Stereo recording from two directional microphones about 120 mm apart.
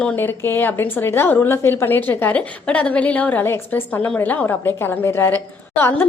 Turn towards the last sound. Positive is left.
turn(degrees=20)  # may be behind; listen again after turning